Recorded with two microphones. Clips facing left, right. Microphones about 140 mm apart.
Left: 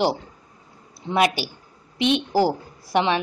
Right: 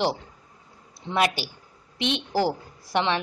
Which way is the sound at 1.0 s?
15° left (ahead or behind).